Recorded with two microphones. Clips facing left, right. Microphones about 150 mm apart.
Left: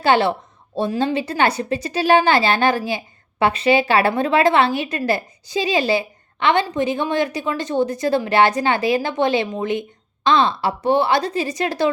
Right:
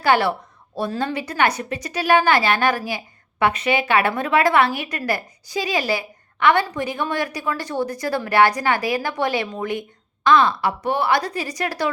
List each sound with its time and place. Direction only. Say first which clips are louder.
0.0 s a woman's voice: left 2 dB; 25° left (ahead or behind)